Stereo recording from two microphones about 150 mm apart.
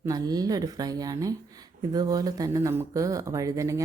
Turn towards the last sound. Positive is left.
turn(degrees=-20)  # may be behind; listen again after turning